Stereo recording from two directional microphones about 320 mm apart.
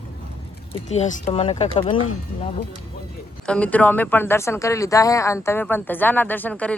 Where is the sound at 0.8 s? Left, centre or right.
Left.